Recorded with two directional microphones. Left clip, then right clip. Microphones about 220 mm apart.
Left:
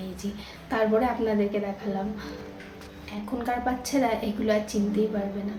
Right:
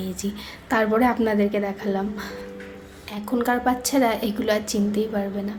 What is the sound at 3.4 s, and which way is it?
A woman's voice, 55° right (ahead or behind).